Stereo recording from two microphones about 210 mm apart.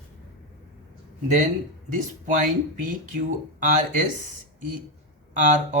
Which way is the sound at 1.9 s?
35° right (ahead or behind).